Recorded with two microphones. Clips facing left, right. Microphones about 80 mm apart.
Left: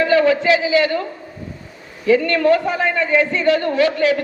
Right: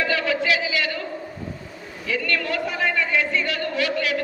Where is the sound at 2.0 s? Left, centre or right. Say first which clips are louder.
Left 11 dB; left.